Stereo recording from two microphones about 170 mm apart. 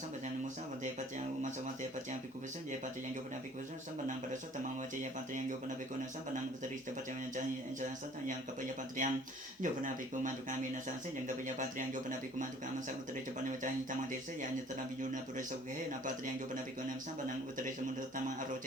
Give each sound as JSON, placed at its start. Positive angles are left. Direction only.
{"t": 1.4, "sound": "a sound", "side_deg": -50}
{"t": 9.0, "sound": "speech", "side_deg": -50}
{"t": 15.9, "sound": "speech", "side_deg": -50}